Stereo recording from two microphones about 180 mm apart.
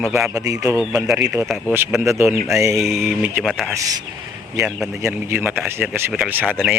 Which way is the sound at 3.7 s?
20° right (ahead or behind).